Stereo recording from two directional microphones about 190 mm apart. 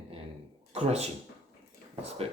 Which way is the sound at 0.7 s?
35° right (ahead or behind).